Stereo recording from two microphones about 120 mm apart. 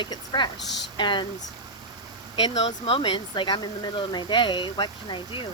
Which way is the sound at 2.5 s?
55° left (ahead or behind).